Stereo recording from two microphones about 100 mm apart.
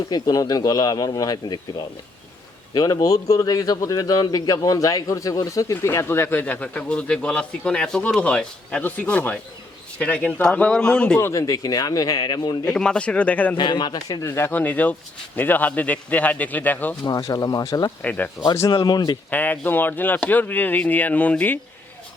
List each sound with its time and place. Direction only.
0.1 s a man's voice: 40° left (ahead or behind); by 11.2 s 10° left (ahead or behind)
11.2 s a man's voice: 30° left (ahead or behind)
12.6 s a man's voice: 10° left (ahead or behind)
13.6 s speech: 50° left (ahead or behind)
14.3 s a man's voice: 25° left (ahead or behind)
17.0 s a man's voice: 40° left (ahead or behind)
18.0 s a man's voice: 15° left (ahead or behind)
18.5 s speech: 30° left (ahead or behind)
18.8 s speech: 45° left (ahead or behind)
19.3 s speech: 20° left (ahead or behind)